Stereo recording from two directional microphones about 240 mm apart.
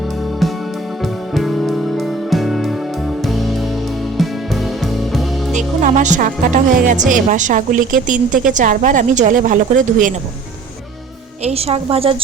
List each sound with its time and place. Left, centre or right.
1.3 s music: centre
5.5 s speech: right
11.4 s a woman's voice: right